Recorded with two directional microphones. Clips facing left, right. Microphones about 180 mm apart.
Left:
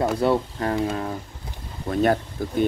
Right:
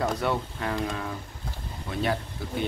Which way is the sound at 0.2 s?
35° left (ahead or behind).